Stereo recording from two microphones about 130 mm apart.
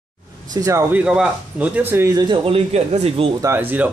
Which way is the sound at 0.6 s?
25° right (ahead or behind).